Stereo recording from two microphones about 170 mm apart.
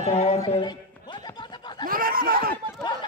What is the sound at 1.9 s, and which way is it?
Snicker, 60° right (ahead or behind).